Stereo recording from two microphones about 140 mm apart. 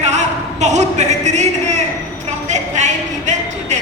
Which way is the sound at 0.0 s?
55° right (ahead or behind).